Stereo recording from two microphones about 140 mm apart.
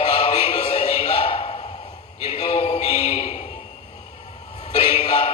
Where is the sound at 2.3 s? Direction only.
50° left (ahead or behind).